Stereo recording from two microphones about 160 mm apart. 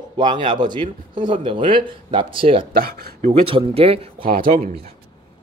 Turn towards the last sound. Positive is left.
turn(degrees=-60)  # may be behind; listen again after turning